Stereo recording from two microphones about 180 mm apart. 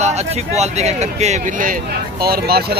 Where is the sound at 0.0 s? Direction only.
40° right (ahead or behind).